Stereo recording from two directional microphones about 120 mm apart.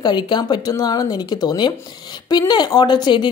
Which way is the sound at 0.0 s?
35° left (ahead or behind).